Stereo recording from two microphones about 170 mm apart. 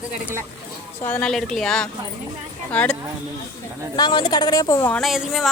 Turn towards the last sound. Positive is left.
turn(degrees=0)  # may be behind; listen again after turning